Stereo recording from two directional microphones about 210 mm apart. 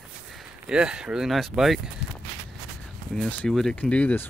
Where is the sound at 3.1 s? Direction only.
5° left (ahead or behind).